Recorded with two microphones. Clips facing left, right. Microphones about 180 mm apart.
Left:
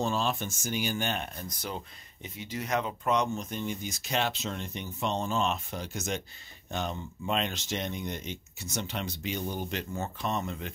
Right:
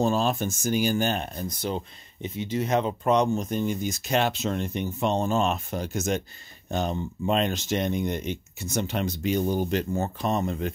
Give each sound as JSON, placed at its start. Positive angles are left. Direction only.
{"t": 0.0, "sound": "speech", "side_deg": -40}